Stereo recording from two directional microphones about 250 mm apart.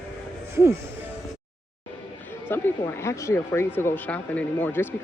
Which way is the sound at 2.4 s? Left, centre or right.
Centre.